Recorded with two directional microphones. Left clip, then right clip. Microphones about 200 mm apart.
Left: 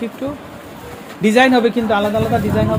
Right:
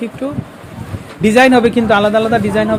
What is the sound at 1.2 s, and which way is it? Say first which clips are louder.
Speech: right 3 dB; 25° right (ahead or behind).